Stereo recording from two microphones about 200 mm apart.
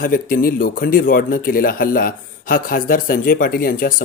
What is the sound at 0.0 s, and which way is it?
A man's voice, 45° left (ahead or behind).